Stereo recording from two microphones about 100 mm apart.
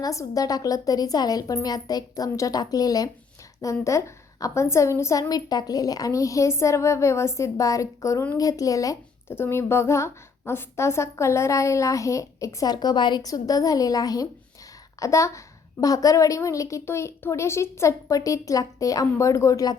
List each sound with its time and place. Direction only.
0.0 s a woman's voice: 35° left (ahead or behind)
9.3 s a woman's voice: 25° left (ahead or behind)